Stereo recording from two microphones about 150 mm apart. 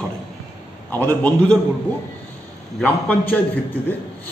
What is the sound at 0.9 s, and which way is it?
Speech, 10° left (ahead or behind).